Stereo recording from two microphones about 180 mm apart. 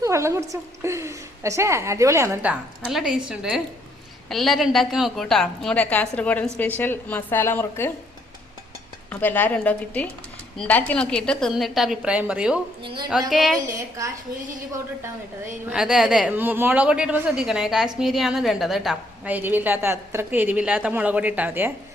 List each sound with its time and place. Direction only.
0.0 s a woman's voice: 15° right (ahead or behind); by 7.9 s 10° left (ahead or behind)
9.0 s a woman's voice: 10° left (ahead or behind); by 12.5 s 5° right (ahead or behind)
12.8 s speech: 25° right (ahead or behind)
13.3 s speech: centre (ahead or behind)
13.7 s a woman's voice: 15° right (ahead or behind)
15.7 s a woman's voice: 5° right (ahead or behind)